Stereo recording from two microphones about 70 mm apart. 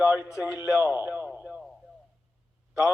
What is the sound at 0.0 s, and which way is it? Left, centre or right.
A man's voice, right.